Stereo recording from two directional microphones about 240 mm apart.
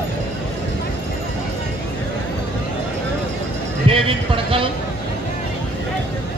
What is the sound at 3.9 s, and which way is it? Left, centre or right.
Speech, right.